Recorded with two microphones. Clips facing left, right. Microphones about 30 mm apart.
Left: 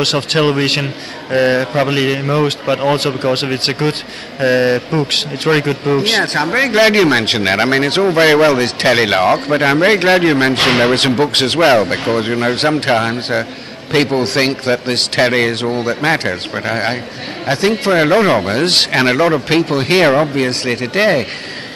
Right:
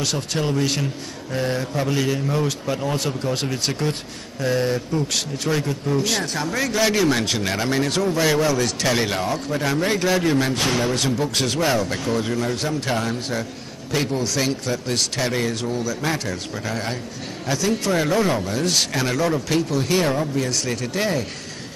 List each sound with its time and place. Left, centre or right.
0.0 s speech: left